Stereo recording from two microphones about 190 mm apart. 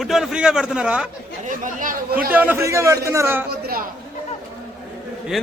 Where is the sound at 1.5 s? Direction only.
45° right (ahead or behind).